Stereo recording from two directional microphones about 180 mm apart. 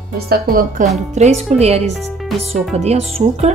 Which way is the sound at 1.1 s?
35° right (ahead or behind).